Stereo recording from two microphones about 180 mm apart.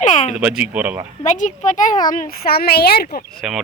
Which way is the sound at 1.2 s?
45° left (ahead or behind).